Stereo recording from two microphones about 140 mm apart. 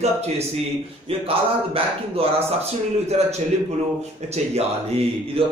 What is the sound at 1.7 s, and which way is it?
Speech, 45° right (ahead or behind).